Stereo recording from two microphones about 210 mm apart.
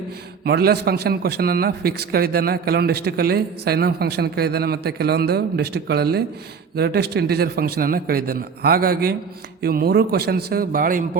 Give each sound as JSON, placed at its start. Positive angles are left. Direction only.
{"t": 0.4, "sound": "a man's voice", "side_deg": -50}